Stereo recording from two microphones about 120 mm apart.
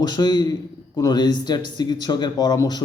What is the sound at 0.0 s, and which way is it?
Speech, 35° left (ahead or behind).